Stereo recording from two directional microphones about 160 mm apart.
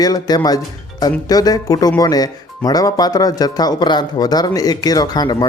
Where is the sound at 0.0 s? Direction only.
25° left (ahead or behind).